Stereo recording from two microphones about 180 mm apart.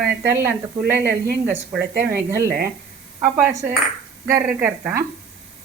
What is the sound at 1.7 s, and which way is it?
Speech, 60° right (ahead or behind).